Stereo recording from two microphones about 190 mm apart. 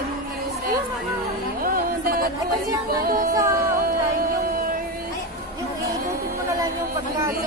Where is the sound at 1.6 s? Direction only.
50° right (ahead or behind).